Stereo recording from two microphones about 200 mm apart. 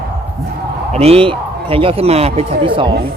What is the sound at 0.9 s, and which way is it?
Speech, 30° right (ahead or behind).